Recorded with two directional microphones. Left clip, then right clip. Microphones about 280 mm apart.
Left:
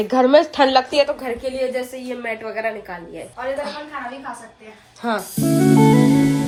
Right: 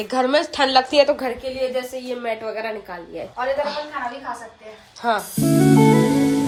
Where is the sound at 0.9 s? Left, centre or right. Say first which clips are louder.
Right 2 dB; right.